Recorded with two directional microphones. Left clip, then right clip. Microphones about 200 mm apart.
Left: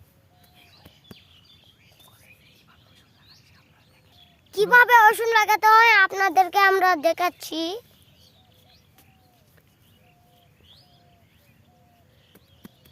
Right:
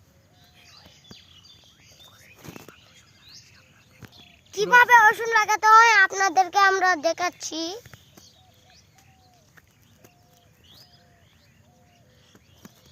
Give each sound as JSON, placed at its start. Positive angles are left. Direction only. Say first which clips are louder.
{"t": 4.5, "sound": "a child's voice", "louder": "left 1 dB", "side_deg": 35}
{"t": 5.8, "sound": "a child's voice", "louder": "even", "side_deg": 10}